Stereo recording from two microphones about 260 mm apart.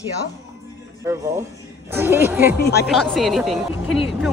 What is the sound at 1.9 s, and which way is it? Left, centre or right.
A woman's voice, centre.